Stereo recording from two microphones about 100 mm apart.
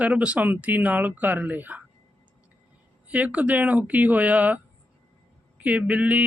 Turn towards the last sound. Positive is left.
turn(degrees=-15)  # may be behind; listen again after turning